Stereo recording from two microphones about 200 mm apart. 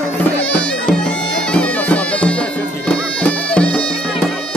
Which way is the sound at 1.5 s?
5° left (ahead or behind).